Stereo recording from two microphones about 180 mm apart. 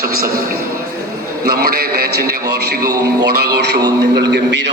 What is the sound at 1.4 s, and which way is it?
A man's voice, 60° right (ahead or behind).